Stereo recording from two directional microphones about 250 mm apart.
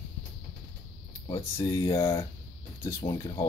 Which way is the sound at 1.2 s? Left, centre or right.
Centre.